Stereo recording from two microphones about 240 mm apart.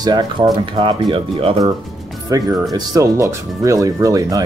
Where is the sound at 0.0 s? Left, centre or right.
Centre.